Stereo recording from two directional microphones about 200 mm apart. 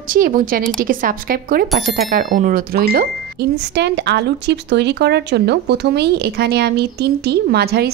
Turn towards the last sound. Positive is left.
turn(degrees=-55)  # may be behind; listen again after turning